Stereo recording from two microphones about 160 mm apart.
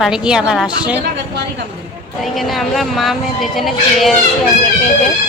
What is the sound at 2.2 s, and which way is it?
Speech, centre (ahead or behind).